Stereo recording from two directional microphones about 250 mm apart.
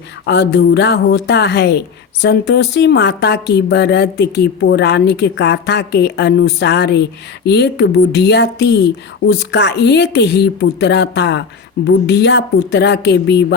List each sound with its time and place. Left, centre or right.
0.3 s speech: left